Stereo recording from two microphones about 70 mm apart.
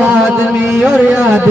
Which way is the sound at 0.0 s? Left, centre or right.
Centre.